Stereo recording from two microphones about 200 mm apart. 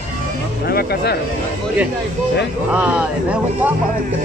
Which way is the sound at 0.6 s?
50° left (ahead or behind).